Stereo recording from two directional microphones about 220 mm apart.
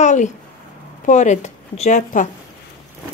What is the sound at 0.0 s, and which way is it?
A woman's voice, 35° left (ahead or behind).